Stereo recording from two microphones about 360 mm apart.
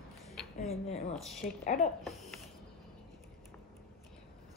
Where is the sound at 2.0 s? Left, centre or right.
Centre.